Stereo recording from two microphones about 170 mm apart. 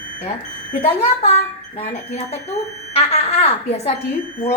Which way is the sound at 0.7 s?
40° left (ahead or behind).